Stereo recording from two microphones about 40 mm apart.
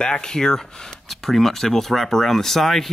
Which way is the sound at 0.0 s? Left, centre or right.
Centre.